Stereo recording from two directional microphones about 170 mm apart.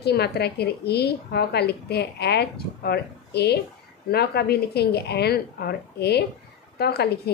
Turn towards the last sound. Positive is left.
turn(degrees=70)  # may be behind; listen again after turning